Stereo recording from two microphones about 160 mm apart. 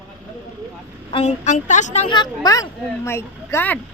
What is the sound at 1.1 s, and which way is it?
Speech, 45° left (ahead or behind).